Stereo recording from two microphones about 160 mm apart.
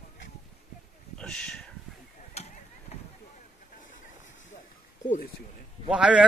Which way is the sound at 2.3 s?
45° left (ahead or behind).